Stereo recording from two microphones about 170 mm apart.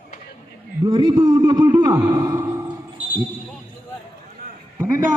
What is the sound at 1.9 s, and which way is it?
Speech, 25° right (ahead or behind).